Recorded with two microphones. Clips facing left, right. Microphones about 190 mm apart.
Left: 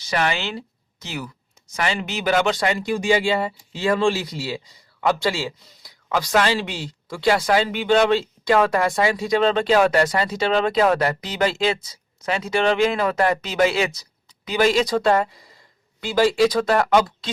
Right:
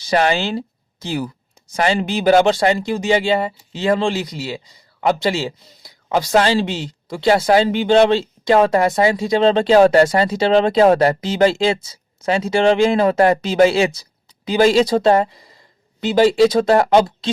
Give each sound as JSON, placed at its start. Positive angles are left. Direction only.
{"t": 0.0, "sound": "speech", "side_deg": -35}